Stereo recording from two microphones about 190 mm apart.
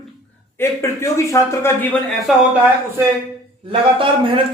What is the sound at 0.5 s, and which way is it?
Speech, 15° left (ahead or behind).